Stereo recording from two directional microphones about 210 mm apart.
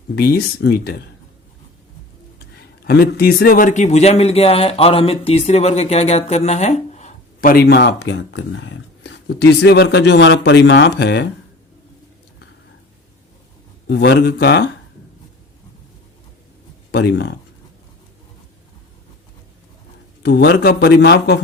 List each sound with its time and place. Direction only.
0.2 s a man's voice: 50° left (ahead or behind)
2.6 s a man's voice: 50° left (ahead or behind); by 7.5 s 35° left (ahead or behind)
7.5 s speech: 50° left (ahead or behind)
13.8 s a man's voice: 50° left (ahead or behind)
16.9 s speech: 55° left (ahead or behind)
20.2 s a man's voice: 50° left (ahead or behind)